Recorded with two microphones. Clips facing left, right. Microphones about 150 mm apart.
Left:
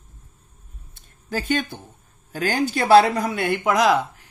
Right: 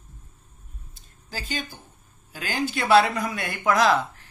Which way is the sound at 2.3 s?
40° left (ahead or behind).